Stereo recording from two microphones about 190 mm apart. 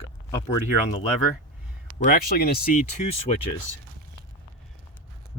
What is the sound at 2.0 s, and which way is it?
Speech, 50° left (ahead or behind).